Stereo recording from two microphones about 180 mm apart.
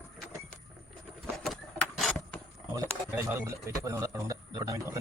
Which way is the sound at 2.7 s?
10° right (ahead or behind).